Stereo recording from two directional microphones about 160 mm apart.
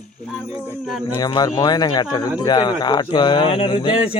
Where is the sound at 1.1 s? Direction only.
25° left (ahead or behind).